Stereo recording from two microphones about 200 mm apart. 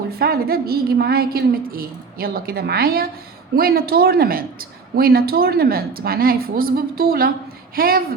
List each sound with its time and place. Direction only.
0.2 s a woman's voice: 50° right (ahead or behind)